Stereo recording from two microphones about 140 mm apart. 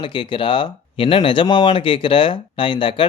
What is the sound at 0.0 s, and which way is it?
Speech, 35° left (ahead or behind).